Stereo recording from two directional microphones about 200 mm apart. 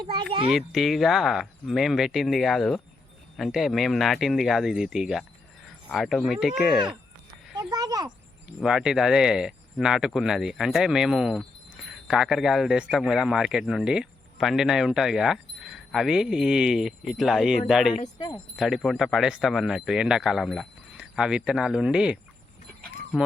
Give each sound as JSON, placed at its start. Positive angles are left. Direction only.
{"t": 0.0, "sound": "a child's voice", "side_deg": -25}
{"t": 0.5, "sound": "speech", "side_deg": 0}
{"t": 7.7, "sound": "a sound", "side_deg": -20}
{"t": 8.6, "sound": "speech", "side_deg": -5}